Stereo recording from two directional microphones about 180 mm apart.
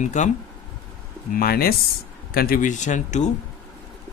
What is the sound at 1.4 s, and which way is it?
Speech, 55° left (ahead or behind).